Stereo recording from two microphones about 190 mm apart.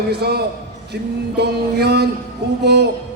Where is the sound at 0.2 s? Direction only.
60° right (ahead or behind).